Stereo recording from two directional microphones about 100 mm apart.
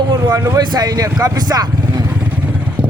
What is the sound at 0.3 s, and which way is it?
Speech, 35° right (ahead or behind).